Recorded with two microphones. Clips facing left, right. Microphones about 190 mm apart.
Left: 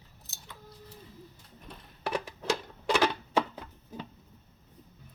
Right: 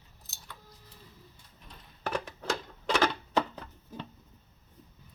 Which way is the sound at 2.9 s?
10° left (ahead or behind).